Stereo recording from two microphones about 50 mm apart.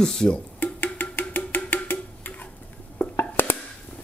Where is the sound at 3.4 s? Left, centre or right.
Left.